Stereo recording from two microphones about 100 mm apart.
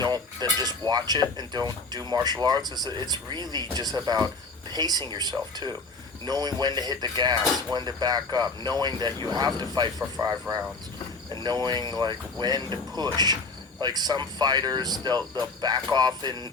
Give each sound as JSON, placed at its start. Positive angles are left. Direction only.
{"t": 0.0, "sound": "speech", "side_deg": -45}
{"t": 11.3, "sound": "speech", "side_deg": -45}